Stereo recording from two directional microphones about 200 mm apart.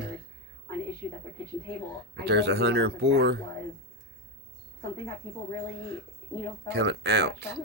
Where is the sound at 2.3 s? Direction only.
60° right (ahead or behind).